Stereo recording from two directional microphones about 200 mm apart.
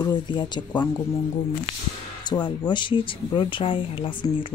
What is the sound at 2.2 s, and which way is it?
Speech, 20° left (ahead or behind).